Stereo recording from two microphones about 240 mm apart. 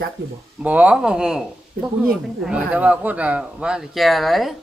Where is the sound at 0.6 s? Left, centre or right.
Centre.